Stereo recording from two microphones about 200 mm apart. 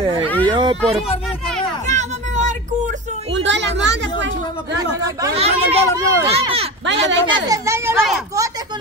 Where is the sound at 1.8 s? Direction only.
35° right (ahead or behind).